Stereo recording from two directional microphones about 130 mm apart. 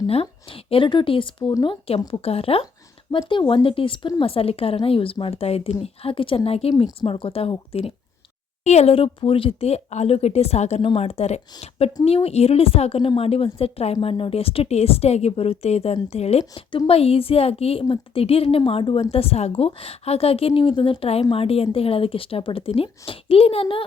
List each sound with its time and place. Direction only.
0.1 s a woman's voice: 45° left (ahead or behind)